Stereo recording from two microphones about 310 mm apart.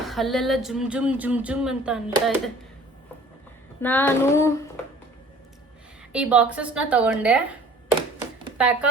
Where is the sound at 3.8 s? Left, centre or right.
Centre.